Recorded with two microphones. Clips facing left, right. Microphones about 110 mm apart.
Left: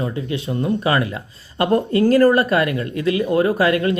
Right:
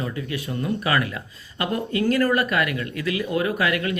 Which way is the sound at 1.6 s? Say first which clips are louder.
Left 8 dB; 40° left (ahead or behind).